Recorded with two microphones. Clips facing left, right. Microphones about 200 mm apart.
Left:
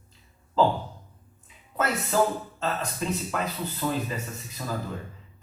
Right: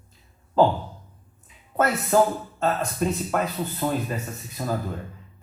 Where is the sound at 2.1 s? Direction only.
50° right (ahead or behind).